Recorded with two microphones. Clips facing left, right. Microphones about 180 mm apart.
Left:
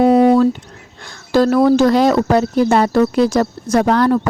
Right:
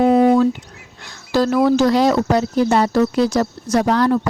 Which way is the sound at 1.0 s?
50° left (ahead or behind).